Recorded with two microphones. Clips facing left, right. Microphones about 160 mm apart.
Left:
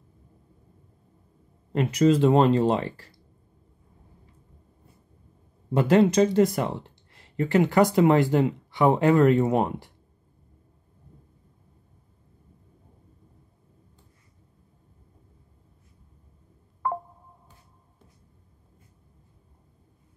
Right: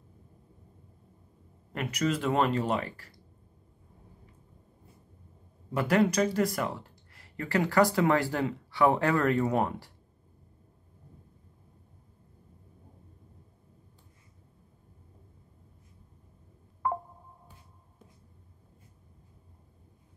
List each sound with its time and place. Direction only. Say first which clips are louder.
1.7 s speech: left 10 dB; 25° left (ahead or behind)
5.7 s speech: left 6 dB; 25° left (ahead or behind)